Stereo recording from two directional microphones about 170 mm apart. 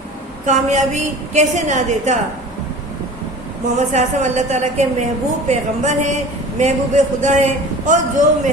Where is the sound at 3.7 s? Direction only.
45° right (ahead or behind).